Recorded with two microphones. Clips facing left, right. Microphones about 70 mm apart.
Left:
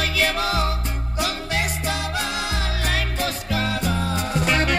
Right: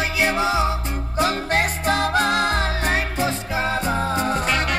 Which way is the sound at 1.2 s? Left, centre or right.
Right.